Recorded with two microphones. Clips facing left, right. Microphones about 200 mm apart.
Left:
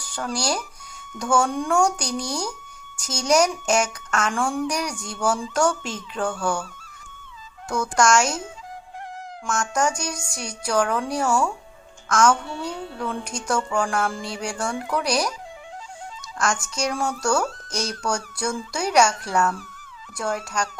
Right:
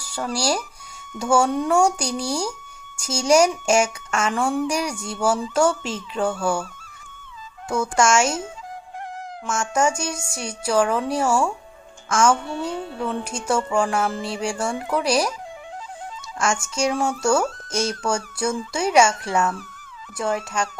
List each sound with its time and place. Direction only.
0.2 s speech: 5° right (ahead or behind)
7.7 s speech: 5° right (ahead or behind)
9.5 s speech: 5° right (ahead or behind)
16.6 s speech: 25° right (ahead or behind)
16.9 s speech: 5° right (ahead or behind)
17.7 s speech: 25° right (ahead or behind)
18.0 s speech: 5° right (ahead or behind)